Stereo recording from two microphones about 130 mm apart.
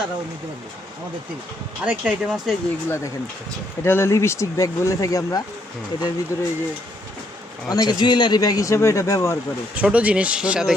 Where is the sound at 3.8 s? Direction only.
20° left (ahead or behind).